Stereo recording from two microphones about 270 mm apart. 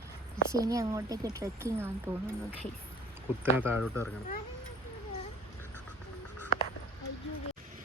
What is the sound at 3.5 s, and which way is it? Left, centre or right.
Speech, centre.